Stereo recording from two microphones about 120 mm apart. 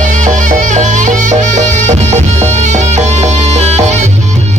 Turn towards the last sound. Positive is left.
turn(degrees=-70)  # may be behind; listen again after turning